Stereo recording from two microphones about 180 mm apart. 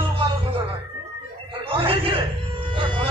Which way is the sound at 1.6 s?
30° right (ahead or behind).